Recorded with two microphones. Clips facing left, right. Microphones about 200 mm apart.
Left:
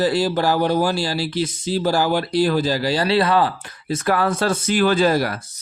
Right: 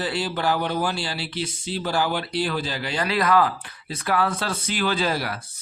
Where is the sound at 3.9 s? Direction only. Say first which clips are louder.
Left 4 dB; 45° left (ahead or behind).